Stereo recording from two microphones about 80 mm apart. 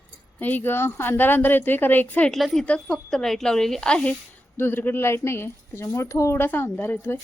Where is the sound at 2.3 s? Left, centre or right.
Centre.